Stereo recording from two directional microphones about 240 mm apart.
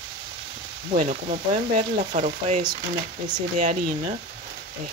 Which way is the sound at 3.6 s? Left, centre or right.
Right.